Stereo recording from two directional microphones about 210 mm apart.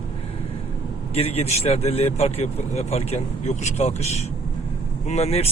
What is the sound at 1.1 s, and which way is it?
A man's voice, 30° left (ahead or behind).